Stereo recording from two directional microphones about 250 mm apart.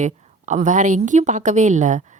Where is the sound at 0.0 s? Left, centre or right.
Right.